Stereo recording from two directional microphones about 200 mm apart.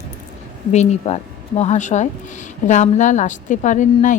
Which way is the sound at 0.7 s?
35° left (ahead or behind).